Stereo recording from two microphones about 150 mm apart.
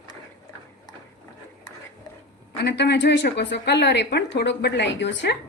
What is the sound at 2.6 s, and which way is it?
A woman's voice, 90° left.